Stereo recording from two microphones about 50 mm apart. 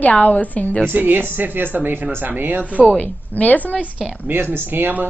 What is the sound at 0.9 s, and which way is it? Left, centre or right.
Speech, right.